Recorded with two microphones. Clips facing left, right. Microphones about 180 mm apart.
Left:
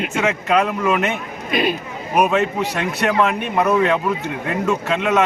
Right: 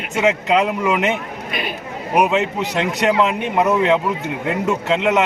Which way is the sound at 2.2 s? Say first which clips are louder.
Even; 20° right (ahead or behind).